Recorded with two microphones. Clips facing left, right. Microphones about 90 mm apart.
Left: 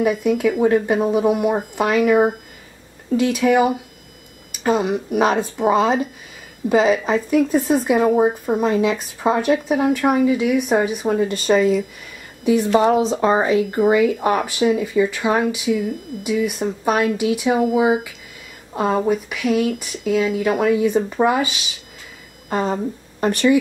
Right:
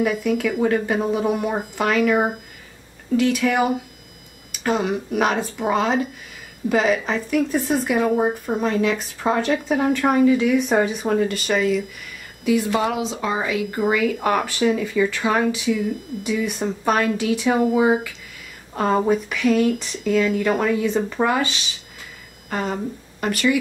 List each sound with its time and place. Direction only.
0.0 s speech: 20° left (ahead or behind)
3.2 s speech: 20° left (ahead or behind)
8.0 s speech: 10° left (ahead or behind)
11.2 s speech: 30° left (ahead or behind)
12.9 s speech: 40° left (ahead or behind); by 21.5 s 15° left (ahead or behind)
22.5 s speech: 30° left (ahead or behind)